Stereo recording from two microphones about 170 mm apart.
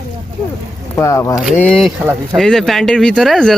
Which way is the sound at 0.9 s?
20° left (ahead or behind).